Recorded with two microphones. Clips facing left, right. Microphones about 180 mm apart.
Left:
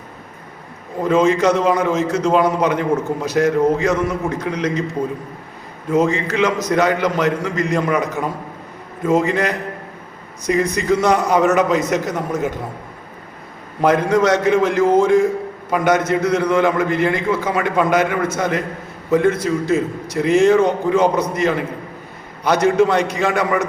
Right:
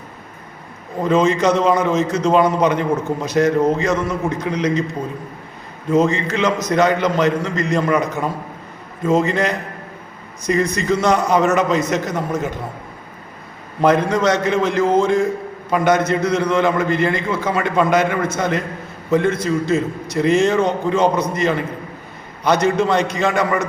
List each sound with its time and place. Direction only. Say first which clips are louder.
1.0 s a man's voice: left 1 dB; 10° left (ahead or behind)
5.9 s a man's voice: right 1 dB; 10° left (ahead or behind)
9.0 s a man's voice: even; 15° left (ahead or behind)
13.8 s a man's voice: even; 10° left (ahead or behind)